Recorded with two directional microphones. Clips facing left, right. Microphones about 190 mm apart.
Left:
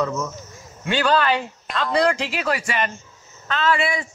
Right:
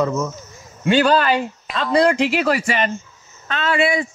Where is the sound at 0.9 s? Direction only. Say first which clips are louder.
Right 5 dB; 40° right (ahead or behind).